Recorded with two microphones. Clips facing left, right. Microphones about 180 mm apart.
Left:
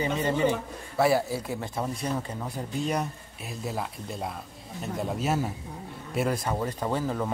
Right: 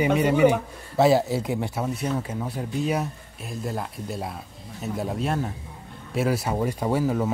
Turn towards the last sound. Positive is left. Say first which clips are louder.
# right 5 dB
turn(degrees=-10)  # may be behind; listen again after turning